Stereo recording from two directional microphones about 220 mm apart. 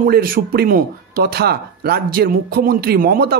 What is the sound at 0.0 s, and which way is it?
A man's voice, 40° right (ahead or behind).